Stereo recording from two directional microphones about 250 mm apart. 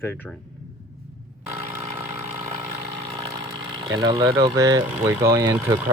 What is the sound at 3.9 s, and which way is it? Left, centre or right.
Speech, centre.